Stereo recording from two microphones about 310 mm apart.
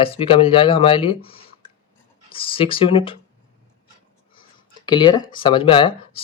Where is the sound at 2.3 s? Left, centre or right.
Centre.